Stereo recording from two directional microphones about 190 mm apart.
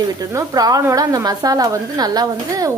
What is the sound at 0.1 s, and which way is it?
Speech, 20° right (ahead or behind).